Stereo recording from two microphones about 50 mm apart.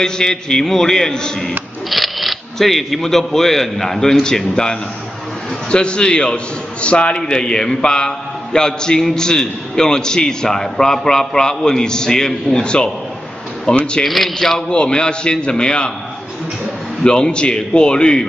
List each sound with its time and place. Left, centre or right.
0.0 s a man's voice: centre
1.9 s a man's voice: centre
14.0 s speech: centre
14.7 s a man's voice: centre
17.0 s a man's voice: centre